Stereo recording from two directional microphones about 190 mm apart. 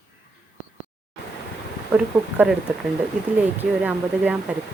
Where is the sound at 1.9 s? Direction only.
5° right (ahead or behind).